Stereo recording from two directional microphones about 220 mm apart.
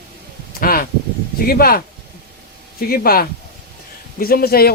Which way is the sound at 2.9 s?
45° left (ahead or behind).